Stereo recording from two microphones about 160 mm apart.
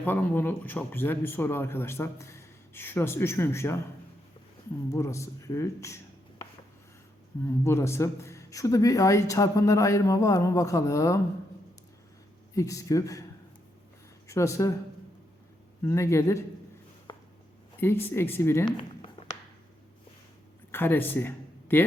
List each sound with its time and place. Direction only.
0.0 s a man's voice: 10° left (ahead or behind)
4.9 s a man's voice: 20° left (ahead or behind)
7.6 s a man's voice: 15° left (ahead or behind)
12.5 s a man's voice: 20° left (ahead or behind)
14.3 s a man's voice: 20° left (ahead or behind)
15.8 s a man's voice: 15° left (ahead or behind)
17.1 s a sound: 25° left (ahead or behind)
17.7 s a man's voice: 15° left (ahead or behind)
20.7 s speech: 15° left (ahead or behind)